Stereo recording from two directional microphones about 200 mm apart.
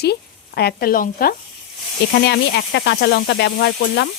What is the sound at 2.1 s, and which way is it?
Speech, 60° left (ahead or behind).